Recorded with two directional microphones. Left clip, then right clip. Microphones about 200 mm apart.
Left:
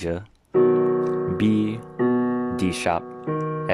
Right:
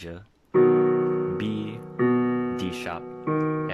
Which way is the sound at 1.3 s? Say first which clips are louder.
Left 7 dB; 25° left (ahead or behind).